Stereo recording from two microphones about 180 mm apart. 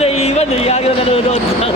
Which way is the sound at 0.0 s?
35° left (ahead or behind).